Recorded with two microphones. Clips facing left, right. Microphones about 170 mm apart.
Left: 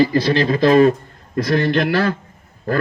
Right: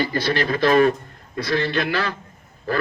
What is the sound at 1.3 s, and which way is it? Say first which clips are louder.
Speech: left 5 dB; 50° left (ahead or behind).